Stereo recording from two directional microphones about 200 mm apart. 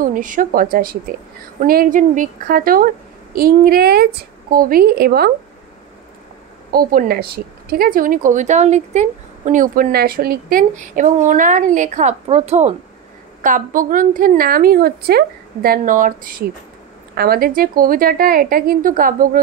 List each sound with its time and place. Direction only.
0.0 s a woman's voice: 40° right (ahead or behind)
6.7 s a woman's voice: 45° right (ahead or behind)